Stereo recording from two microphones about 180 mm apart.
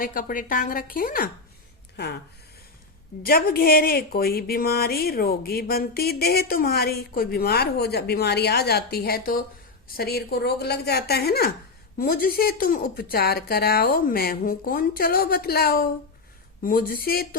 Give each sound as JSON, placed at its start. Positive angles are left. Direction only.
{"t": 0.0, "sound": "a woman's voice", "side_deg": 50}
{"t": 3.2, "sound": "speech", "side_deg": 55}